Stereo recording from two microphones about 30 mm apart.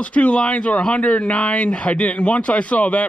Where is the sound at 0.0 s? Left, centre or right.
Left.